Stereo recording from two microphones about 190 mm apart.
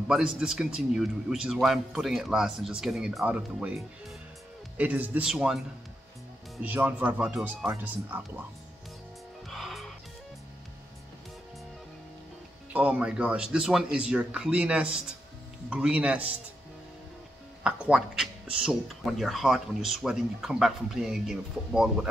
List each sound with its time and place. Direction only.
0.1 s speech: 5° right (ahead or behind)
6.6 s speech: 10° right (ahead or behind)
9.5 s music: centre (ahead or behind)
12.7 s speech: 5° right (ahead or behind)
17.6 s speech: 5° right (ahead or behind)